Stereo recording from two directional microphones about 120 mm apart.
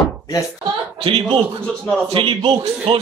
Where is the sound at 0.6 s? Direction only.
50° right (ahead or behind).